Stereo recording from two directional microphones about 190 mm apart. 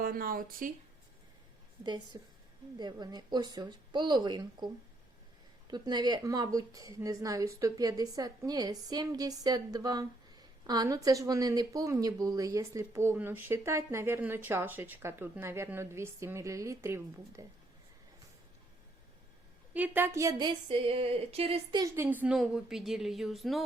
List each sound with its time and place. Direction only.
0.0 s speech: 50° right (ahead or behind)
2.1 s speech: 20° right (ahead or behind)
5.7 s a woman's voice: 20° right (ahead or behind)
19.7 s speech: 10° right (ahead or behind); by 21.8 s 25° right (ahead or behind)
21.9 s a woman's voice: 10° right (ahead or behind)